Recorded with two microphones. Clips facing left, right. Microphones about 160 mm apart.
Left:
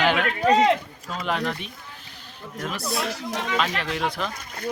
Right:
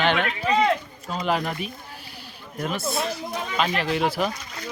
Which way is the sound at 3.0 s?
90° left.